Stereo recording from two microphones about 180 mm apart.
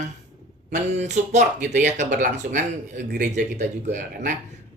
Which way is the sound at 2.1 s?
65° right (ahead or behind).